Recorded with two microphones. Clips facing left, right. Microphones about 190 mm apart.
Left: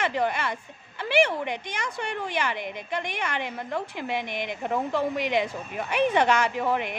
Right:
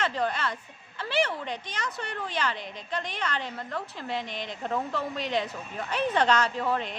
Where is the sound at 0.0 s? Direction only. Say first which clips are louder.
Left 2 dB; 15° left (ahead or behind).